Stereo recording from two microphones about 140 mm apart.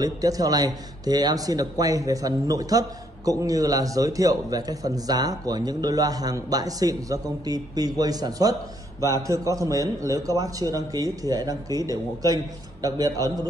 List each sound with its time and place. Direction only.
0.0 s speech: 25° right (ahead or behind)